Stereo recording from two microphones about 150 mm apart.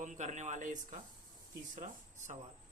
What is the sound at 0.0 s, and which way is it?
Speech, 55° right (ahead or behind).